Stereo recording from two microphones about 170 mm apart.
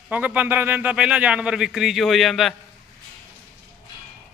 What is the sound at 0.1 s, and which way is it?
A man's voice, 10° right (ahead or behind).